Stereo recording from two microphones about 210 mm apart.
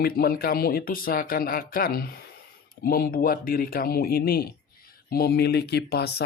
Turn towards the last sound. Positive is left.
turn(degrees=50)  # may be behind; listen again after turning